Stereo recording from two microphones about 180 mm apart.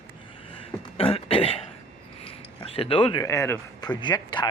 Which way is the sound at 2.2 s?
30° left (ahead or behind).